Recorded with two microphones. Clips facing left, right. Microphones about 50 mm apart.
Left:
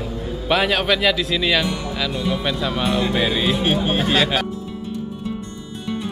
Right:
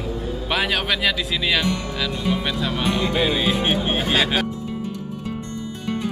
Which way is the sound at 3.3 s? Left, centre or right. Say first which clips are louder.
Left 1 dB; centre.